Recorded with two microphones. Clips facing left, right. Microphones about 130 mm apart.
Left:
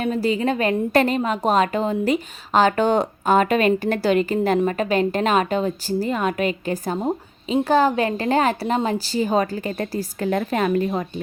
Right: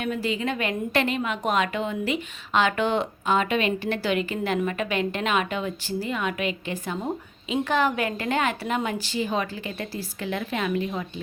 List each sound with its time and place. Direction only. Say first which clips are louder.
0.0 s a woman's voice: left 6 dB; 35° left (ahead or behind)